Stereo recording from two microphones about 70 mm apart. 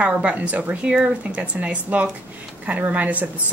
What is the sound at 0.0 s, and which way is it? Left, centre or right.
Speech, centre.